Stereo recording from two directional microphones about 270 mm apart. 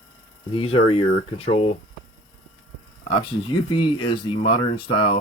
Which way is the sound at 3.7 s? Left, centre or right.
Centre.